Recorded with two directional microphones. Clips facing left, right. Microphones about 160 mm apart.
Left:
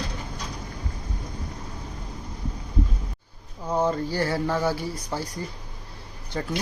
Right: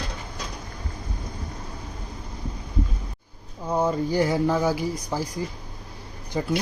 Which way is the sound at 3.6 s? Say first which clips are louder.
Right 1 dB; 10° right (ahead or behind).